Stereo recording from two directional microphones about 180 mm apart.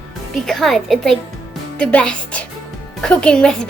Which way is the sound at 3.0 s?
5° left (ahead or behind).